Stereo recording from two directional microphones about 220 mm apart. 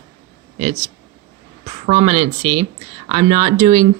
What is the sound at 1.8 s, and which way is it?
Speech, 30° right (ahead or behind).